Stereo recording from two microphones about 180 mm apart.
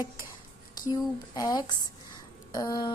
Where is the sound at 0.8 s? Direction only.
20° left (ahead or behind).